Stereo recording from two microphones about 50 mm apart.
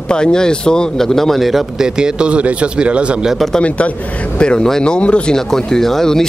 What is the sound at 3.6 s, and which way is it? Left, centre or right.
Speech, left.